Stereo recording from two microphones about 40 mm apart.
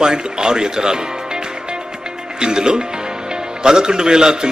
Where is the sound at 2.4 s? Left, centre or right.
Centre.